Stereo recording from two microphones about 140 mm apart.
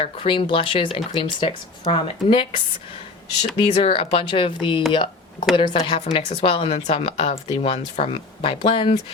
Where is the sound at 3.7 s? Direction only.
40° left (ahead or behind).